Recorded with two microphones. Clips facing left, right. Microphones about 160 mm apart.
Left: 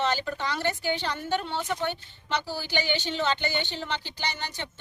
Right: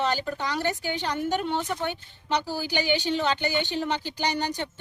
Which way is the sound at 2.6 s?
40° right (ahead or behind).